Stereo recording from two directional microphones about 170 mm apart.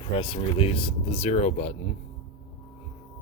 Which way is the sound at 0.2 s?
30° left (ahead or behind).